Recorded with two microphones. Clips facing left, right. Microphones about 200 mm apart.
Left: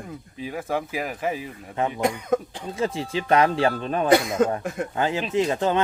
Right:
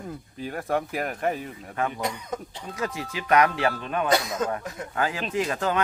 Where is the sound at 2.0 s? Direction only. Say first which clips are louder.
Left 8 dB; 50° left (ahead or behind).